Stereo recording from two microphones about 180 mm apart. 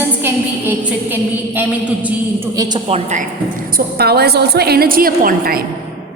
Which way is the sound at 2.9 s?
40° right (ahead or behind).